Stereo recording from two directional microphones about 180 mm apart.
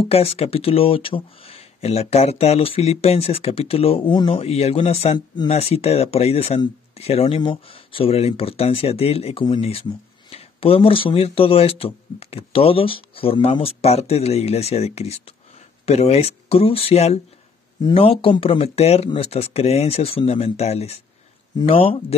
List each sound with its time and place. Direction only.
0.0 s speech: 35° left (ahead or behind)